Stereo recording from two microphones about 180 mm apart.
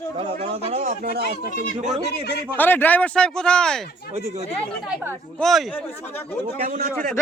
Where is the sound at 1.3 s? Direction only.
40° right (ahead or behind).